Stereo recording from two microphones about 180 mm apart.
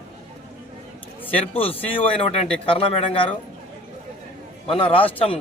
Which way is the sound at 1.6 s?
30° left (ahead or behind).